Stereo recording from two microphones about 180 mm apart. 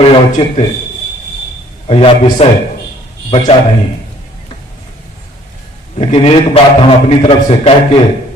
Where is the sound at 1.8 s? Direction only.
35° left (ahead or behind).